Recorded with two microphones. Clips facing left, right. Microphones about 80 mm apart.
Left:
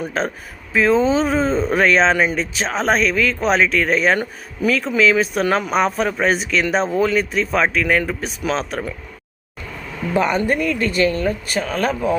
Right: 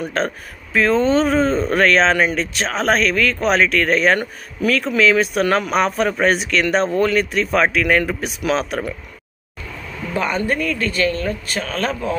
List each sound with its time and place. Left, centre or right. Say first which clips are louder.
0.0 s speech: right 1 dB; centre
10.2 s speech: left 2 dB; centre